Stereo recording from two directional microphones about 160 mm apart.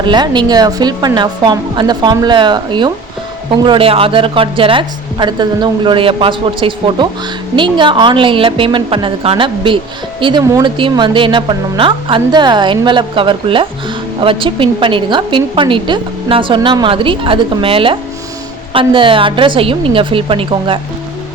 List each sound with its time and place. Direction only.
0.0 s a woman's voice: 30° right (ahead or behind)